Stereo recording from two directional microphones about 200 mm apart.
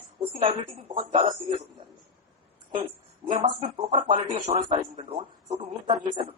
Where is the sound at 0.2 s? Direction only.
30° right (ahead or behind).